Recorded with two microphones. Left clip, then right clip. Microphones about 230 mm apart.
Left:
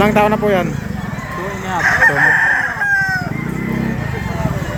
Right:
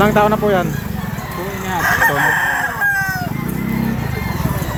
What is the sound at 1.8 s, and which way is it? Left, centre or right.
Chicken, right.